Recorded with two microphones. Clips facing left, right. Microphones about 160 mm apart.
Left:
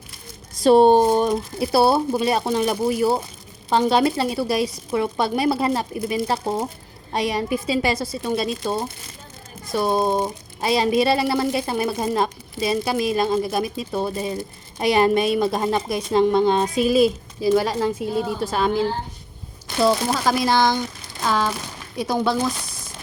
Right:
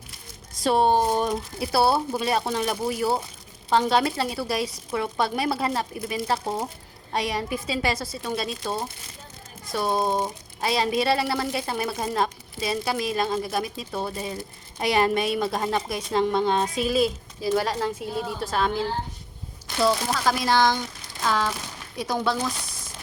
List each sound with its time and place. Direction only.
0.6 s speech: 30° left (ahead or behind); by 17.9 s 5° left (ahead or behind)
18.0 s speech: 50° left (ahead or behind)
18.5 s speech: 10° left (ahead or behind)
19.8 s speech: 25° left (ahead or behind)